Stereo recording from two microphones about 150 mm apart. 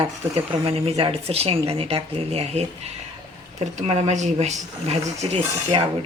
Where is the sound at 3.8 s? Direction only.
50° right (ahead or behind).